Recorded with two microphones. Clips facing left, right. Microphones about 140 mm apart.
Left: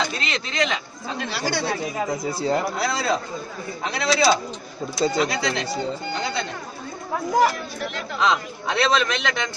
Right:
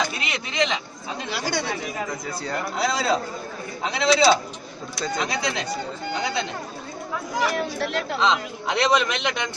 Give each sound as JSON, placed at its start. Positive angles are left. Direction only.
{"t": 0.0, "sound": "speech", "side_deg": -15}
{"t": 2.0, "sound": "speech", "side_deg": 25}
{"t": 2.8, "sound": "a man's voice", "side_deg": -15}
{"t": 4.9, "sound": "speech", "side_deg": 30}
{"t": 5.3, "sound": "a man's voice", "side_deg": -20}
{"t": 7.5, "sound": "speech", "side_deg": -75}
{"t": 8.2, "sound": "speech", "side_deg": -20}